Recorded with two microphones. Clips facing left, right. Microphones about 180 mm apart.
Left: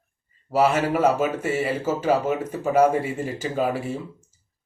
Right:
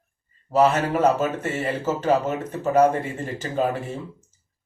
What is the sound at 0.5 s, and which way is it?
Speech, 10° left (ahead or behind).